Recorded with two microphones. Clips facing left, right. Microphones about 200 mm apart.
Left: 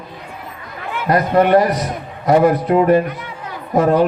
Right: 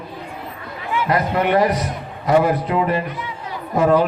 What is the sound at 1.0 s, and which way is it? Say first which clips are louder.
A man's voice: left 6 dB; 45° left (ahead or behind).